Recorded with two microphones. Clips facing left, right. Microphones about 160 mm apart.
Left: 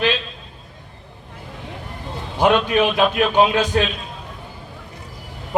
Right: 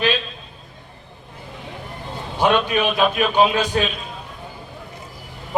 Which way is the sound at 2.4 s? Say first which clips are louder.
Left 2 dB; 15° left (ahead or behind).